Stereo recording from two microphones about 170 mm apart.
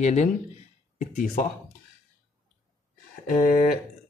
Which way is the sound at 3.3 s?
50° left (ahead or behind).